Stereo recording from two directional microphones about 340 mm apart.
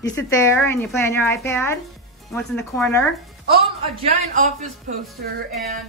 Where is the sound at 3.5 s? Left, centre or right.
Centre.